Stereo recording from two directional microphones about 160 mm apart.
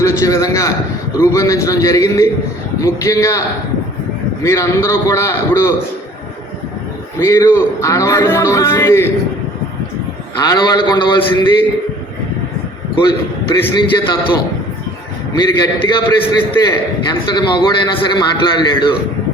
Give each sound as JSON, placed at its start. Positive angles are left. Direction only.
{"t": 0.0, "sound": "a man's voice", "side_deg": 20}
{"t": 4.4, "sound": "a man's voice", "side_deg": 20}
{"t": 7.2, "sound": "a man's voice", "side_deg": 20}
{"t": 10.4, "sound": "a man's voice", "side_deg": 25}
{"t": 13.0, "sound": "a man's voice", "side_deg": 30}
{"t": 15.4, "sound": "a man's voice", "side_deg": 25}